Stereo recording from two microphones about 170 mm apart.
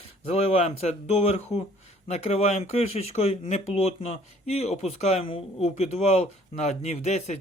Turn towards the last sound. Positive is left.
turn(degrees=40)  # may be behind; listen again after turning